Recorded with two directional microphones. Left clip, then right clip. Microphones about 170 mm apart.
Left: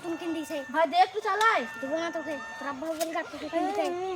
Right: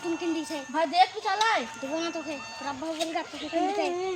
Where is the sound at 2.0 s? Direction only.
45° left (ahead or behind).